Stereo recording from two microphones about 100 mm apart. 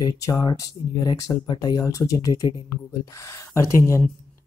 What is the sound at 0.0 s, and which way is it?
Speech, 40° left (ahead or behind).